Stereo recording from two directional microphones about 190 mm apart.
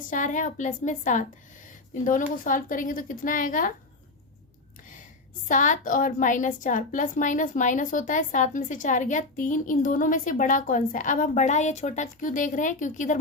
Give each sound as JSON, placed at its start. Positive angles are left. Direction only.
{"t": 0.1, "sound": "a woman's voice", "side_deg": 40}
{"t": 5.5, "sound": "a woman's voice", "side_deg": 40}